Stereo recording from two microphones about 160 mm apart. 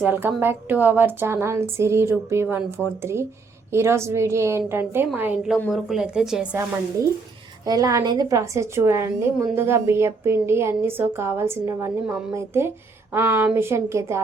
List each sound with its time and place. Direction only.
0.0 s a woman's voice: 15° right (ahead or behind)
7.6 s a woman's voice: 20° right (ahead or behind)